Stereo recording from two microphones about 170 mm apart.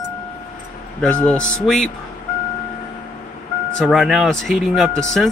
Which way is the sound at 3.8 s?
5° right (ahead or behind).